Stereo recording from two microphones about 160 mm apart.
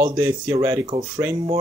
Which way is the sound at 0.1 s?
20° right (ahead or behind).